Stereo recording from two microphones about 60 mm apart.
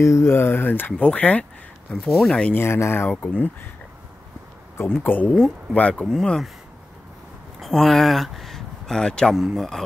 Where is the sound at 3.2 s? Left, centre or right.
Left.